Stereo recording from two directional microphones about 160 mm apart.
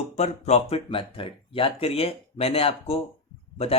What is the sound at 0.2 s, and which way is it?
Speech, 40° left (ahead or behind).